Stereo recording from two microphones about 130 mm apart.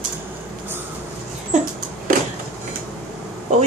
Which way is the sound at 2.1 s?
90° right.